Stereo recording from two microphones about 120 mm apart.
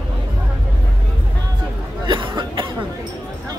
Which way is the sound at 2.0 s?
40° right (ahead or behind).